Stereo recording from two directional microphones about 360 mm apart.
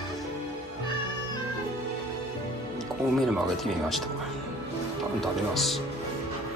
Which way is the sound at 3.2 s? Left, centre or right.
Centre.